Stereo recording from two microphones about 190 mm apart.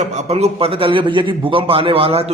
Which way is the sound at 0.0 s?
35° right (ahead or behind).